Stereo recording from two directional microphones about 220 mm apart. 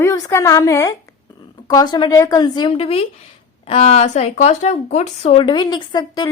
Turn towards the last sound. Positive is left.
turn(degrees=20)  # may be behind; listen again after turning